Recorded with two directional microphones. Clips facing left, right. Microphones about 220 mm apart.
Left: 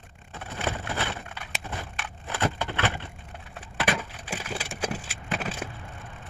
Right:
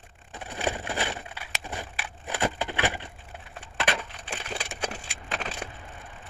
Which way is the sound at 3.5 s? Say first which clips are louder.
Left 2 dB; 5° left (ahead or behind).